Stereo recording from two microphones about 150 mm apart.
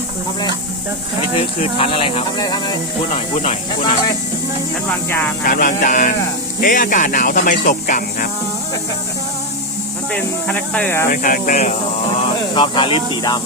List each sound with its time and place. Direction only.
1.4 s speech: 35° left (ahead or behind)
3.3 s speech: 50° left (ahead or behind)
4.9 s speech: 15° left (ahead or behind)
5.5 s speech: 65° left (ahead or behind)
6.6 s speech: 70° left (ahead or behind)
10.1 s speech: 10° left (ahead or behind)
11.1 s speech: 65° left (ahead or behind); by 11.8 s 50° left (ahead or behind)
12.5 s speech: 35° left (ahead or behind)